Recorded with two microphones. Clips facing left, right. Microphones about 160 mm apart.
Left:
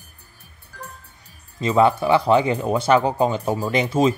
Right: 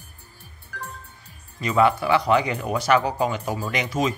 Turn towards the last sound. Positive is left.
turn(degrees=30)  # may be behind; listen again after turning